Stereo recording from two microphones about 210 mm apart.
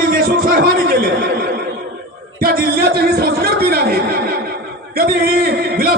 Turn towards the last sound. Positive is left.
turn(degrees=-45)  # may be behind; listen again after turning